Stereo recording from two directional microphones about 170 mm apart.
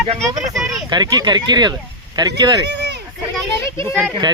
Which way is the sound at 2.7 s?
85° right.